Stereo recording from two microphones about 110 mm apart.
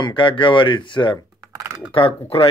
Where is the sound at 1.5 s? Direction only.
30° right (ahead or behind).